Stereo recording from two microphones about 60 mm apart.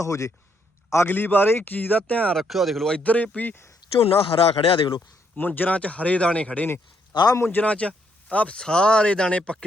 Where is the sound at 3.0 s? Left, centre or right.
Left.